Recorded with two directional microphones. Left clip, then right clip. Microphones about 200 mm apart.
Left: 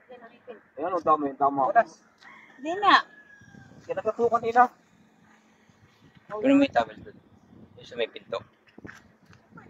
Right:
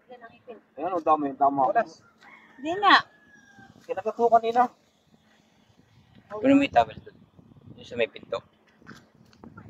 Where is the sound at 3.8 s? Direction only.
50° right (ahead or behind).